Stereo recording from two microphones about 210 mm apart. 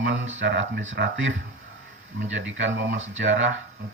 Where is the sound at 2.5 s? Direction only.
65° right (ahead or behind).